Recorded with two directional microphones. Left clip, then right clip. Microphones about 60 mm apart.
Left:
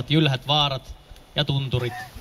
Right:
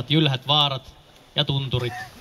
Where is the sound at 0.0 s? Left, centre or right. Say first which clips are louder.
Even; left.